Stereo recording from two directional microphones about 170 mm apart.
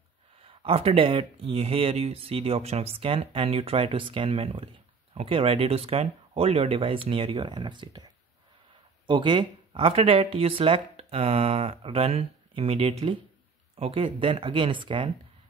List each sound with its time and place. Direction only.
0.4 s speech: 35° right (ahead or behind)